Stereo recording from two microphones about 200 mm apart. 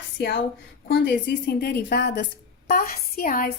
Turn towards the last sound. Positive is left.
turn(degrees=45)  # may be behind; listen again after turning